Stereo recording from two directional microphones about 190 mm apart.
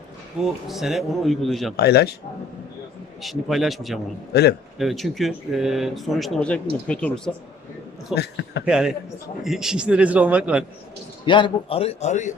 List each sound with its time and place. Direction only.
0.3 s speech: centre (ahead or behind)
1.7 s speech: 60° left (ahead or behind)
3.2 s speech: centre (ahead or behind)
4.3 s speech: 55° left (ahead or behind)
4.8 s speech: centre (ahead or behind)
8.1 s speech: 60° left (ahead or behind)
8.6 s a man's voice: 5° right (ahead or behind)
11.3 s a man's voice: 25° left (ahead or behind)